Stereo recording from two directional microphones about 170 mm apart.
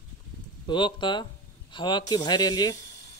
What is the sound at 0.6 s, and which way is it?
Speech, 30° left (ahead or behind).